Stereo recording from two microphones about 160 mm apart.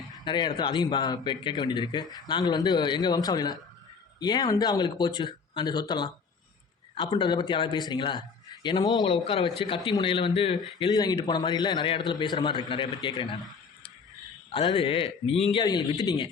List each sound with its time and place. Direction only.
0.3 s a man's voice: 30° left (ahead or behind)
10.8 s a man's voice: 25° left (ahead or behind)
14.5 s a man's voice: 30° left (ahead or behind)